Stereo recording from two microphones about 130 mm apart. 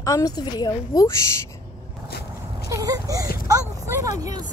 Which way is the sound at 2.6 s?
25° right (ahead or behind).